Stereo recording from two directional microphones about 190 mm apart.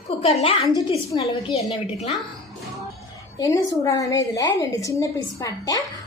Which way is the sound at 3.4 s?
15° left (ahead or behind).